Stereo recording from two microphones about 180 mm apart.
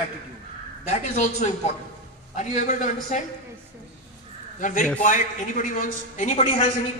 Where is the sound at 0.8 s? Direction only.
40° left (ahead or behind).